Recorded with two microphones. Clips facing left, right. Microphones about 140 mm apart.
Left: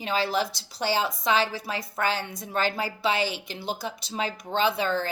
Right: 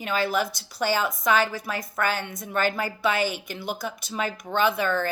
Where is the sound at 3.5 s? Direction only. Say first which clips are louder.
Right 1 dB; 30° left (ahead or behind).